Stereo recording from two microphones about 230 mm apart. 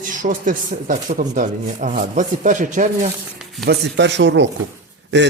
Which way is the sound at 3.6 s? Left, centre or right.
Right.